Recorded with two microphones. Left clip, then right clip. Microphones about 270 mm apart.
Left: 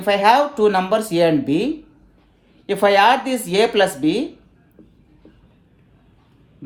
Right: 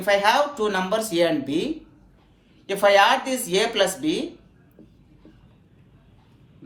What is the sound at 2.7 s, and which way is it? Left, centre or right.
A woman's voice, left.